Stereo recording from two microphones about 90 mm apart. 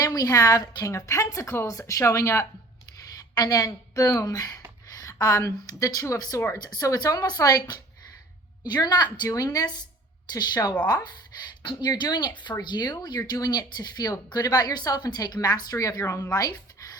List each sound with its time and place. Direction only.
0.0 s a woman's voice: 45° left (ahead or behind)
11.6 s speech: 60° left (ahead or behind)
11.9 s speech: 50° left (ahead or behind)